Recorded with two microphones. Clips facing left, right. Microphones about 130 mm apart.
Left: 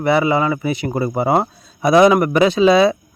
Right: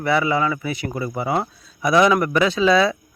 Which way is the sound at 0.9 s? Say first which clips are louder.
Left 6 dB; 40° left (ahead or behind).